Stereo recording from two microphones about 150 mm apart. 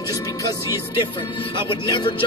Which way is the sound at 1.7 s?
30° left (ahead or behind).